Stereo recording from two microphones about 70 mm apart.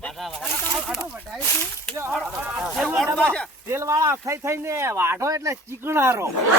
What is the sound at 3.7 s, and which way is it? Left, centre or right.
Speech, right.